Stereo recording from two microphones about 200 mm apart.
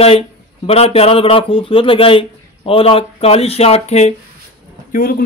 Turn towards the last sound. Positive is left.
turn(degrees=45)  # may be behind; listen again after turning